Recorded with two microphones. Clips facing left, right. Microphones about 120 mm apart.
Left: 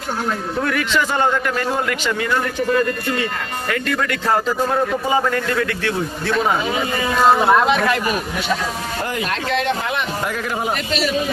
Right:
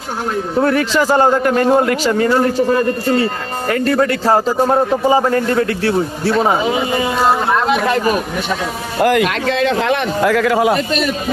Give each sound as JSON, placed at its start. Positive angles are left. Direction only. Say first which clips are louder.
{"t": 0.5, "sound": "a man's voice", "louder": "right 7 dB", "side_deg": -35}
{"t": 6.7, "sound": "speech", "louder": "right 5 dB", "side_deg": -20}
{"t": 7.2, "sound": "speech", "louder": "left 3 dB", "side_deg": 0}
{"t": 9.0, "sound": "a man's voice", "louder": "right 12 dB", "side_deg": -80}
{"t": 10.8, "sound": "a man's voice", "louder": "right 4 dB", "side_deg": -50}